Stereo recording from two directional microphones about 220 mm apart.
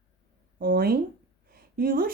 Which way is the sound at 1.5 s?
40° right (ahead or behind).